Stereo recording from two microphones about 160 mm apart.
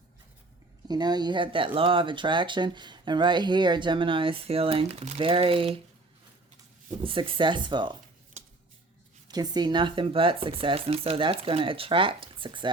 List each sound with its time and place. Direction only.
0.9 s speech: 25° right (ahead or behind)
7.0 s speech: 35° right (ahead or behind)
9.3 s speech: 25° right (ahead or behind)